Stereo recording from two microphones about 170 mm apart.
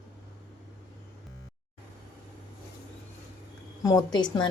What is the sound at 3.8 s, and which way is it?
Speech, 25° left (ahead or behind).